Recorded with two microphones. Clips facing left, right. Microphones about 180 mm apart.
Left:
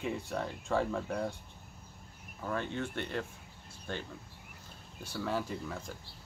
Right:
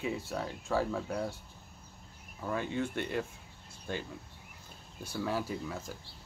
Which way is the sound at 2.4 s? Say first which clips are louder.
Right 2 dB; 10° right (ahead or behind).